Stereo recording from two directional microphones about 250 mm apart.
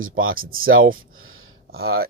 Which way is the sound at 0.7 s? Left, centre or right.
Right.